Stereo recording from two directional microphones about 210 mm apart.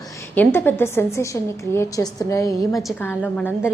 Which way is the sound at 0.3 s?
10° left (ahead or behind).